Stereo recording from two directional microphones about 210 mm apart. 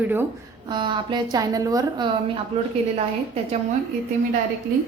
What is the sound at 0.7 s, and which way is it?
A woman's voice, 20° right (ahead or behind).